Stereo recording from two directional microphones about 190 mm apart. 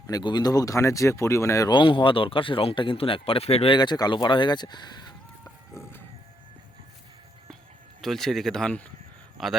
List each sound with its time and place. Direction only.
0.1 s speech: 20° left (ahead or behind)
8.0 s speech: centre (ahead or behind)